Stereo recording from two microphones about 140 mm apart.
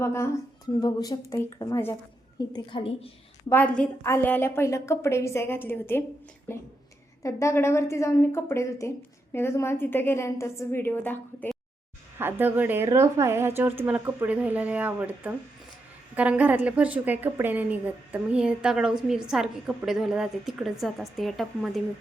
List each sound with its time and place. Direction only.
0.0 s a woman's voice: 20° left (ahead or behind)
0.8 s a woman's voice: 30° left (ahead or behind)
3.5 s a woman's voice: 10° left (ahead or behind)
12.2 s a woman's voice: 15° right (ahead or behind)